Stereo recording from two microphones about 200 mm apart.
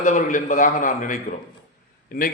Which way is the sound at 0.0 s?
40° left (ahead or behind).